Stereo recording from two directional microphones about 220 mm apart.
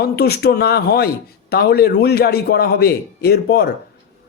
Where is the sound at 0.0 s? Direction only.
45° left (ahead or behind).